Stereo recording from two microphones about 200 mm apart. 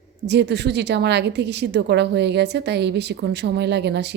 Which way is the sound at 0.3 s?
60° right (ahead or behind).